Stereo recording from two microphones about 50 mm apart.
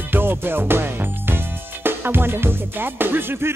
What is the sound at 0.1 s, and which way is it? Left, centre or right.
Music, right.